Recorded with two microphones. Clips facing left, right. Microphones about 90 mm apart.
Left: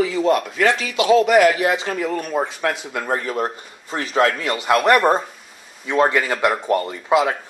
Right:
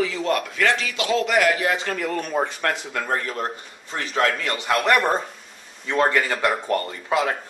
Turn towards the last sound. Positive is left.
turn(degrees=5)  # may be behind; listen again after turning